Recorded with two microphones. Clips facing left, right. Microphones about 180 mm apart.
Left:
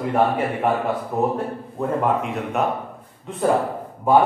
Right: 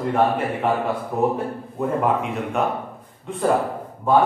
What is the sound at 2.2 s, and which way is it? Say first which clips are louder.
Speech: even; centre (ahead or behind).